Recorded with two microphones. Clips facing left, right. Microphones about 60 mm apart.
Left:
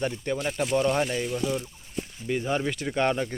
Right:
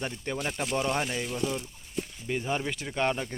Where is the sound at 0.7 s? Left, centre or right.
Centre.